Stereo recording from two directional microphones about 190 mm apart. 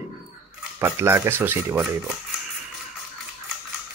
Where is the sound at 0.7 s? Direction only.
15° right (ahead or behind).